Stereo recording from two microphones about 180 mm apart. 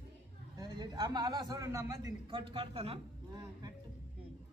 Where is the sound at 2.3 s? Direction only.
30° right (ahead or behind).